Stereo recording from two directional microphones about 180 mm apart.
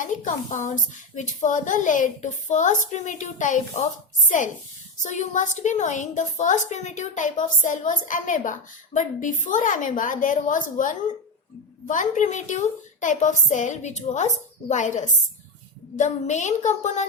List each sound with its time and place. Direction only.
0.0 s a woman's voice: 45° left (ahead or behind)
5.0 s a woman's voice: 45° left (ahead or behind)